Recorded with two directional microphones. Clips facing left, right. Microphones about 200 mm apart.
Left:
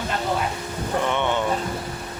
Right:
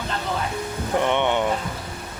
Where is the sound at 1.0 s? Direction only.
20° right (ahead or behind).